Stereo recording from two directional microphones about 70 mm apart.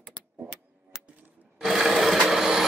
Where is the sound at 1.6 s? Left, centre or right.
Centre.